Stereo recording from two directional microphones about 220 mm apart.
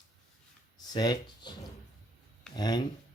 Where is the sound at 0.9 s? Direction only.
20° left (ahead or behind).